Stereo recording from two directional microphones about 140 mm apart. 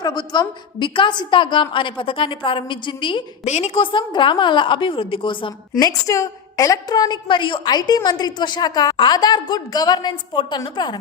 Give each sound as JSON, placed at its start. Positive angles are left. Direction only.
{"t": 0.0, "sound": "a woman's voice", "side_deg": 30}
{"t": 3.4, "sound": "a woman's voice", "side_deg": 55}
{"t": 3.8, "sound": "a woman's voice", "side_deg": 35}
{"t": 6.1, "sound": "a woman's voice", "side_deg": 25}